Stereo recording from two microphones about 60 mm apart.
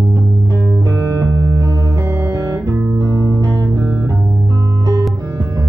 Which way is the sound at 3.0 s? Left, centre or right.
Right.